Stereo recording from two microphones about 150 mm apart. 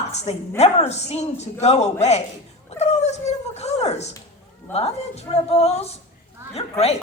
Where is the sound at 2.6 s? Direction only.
45° left (ahead or behind).